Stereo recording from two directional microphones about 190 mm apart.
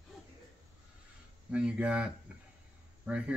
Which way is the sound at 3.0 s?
5° right (ahead or behind).